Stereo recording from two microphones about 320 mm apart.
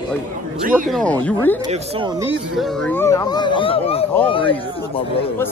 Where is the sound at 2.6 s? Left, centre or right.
Centre.